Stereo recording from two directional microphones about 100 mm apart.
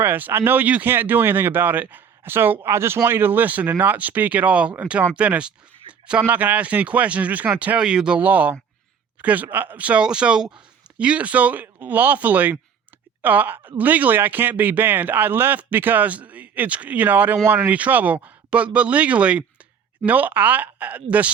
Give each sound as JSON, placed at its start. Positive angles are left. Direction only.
{"t": 0.0, "sound": "a man's voice", "side_deg": -20}